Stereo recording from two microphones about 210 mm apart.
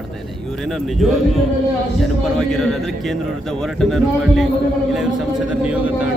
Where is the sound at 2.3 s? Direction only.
Centre (ahead or behind).